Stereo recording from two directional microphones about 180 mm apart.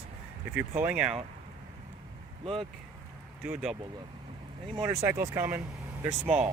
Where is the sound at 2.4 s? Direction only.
30° right (ahead or behind).